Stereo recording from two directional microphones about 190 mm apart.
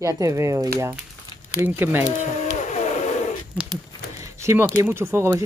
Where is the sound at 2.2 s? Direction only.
40° left (ahead or behind).